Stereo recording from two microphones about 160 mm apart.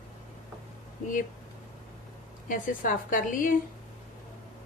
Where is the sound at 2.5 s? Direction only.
55° left (ahead or behind).